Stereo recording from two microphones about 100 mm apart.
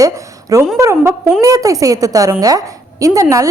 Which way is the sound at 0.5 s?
30° right (ahead or behind).